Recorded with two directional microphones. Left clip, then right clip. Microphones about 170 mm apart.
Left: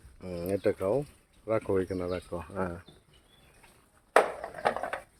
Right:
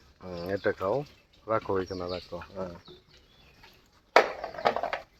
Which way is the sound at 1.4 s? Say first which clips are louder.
Even; 35° left (ahead or behind).